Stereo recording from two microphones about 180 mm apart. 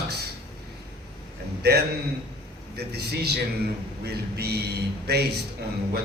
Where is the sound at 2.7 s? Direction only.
65° right (ahead or behind).